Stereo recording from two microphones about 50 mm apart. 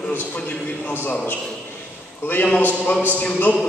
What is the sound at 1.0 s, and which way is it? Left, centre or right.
A man's voice, left.